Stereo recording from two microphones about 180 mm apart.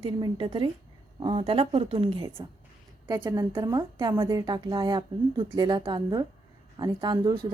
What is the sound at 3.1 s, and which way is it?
A woman's voice, 20° right (ahead or behind).